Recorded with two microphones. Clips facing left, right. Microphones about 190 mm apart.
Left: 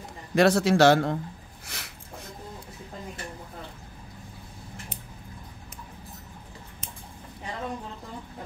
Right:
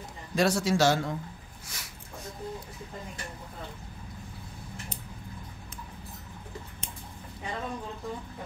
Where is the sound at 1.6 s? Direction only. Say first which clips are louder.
Left 4 dB; 60° left (ahead or behind).